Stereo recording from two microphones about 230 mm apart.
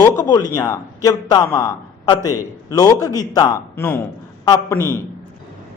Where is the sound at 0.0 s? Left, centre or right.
Centre.